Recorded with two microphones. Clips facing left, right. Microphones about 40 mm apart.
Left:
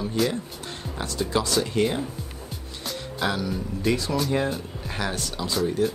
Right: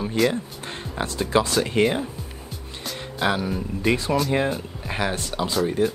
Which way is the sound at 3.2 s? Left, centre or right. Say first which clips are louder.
Right 3 dB; right.